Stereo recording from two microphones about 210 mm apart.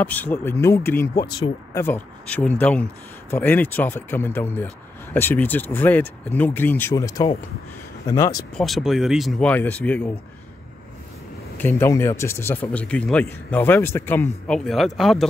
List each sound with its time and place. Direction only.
0.0 s speech: 10° left (ahead or behind)
8.5 s speech: centre (ahead or behind)
11.5 s speech: 10° left (ahead or behind)